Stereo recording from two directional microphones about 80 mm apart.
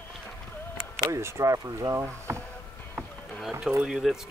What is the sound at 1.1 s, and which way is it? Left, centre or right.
Speech, right.